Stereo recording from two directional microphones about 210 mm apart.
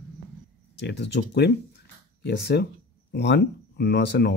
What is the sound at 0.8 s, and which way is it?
Speech, 55° left (ahead or behind).